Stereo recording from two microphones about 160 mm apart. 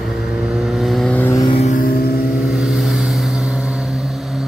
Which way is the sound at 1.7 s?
65° left (ahead or behind).